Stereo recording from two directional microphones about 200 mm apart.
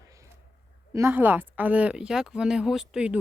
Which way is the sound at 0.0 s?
15° right (ahead or behind).